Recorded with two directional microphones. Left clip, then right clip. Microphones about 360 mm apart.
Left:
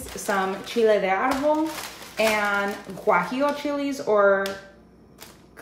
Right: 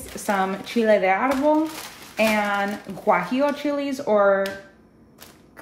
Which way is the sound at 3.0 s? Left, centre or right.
Centre.